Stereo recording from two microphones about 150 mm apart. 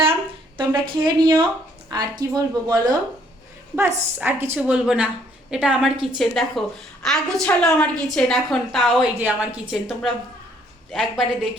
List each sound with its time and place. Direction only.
0.5 s a woman's voice: 30° right (ahead or behind)
3.8 s a woman's voice: 15° right (ahead or behind); by 11.3 s centre (ahead or behind)